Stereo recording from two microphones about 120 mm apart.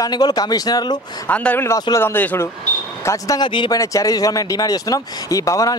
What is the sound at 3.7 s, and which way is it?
Speech, 30° left (ahead or behind).